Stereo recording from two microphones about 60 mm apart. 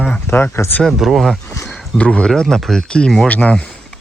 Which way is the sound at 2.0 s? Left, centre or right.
Centre.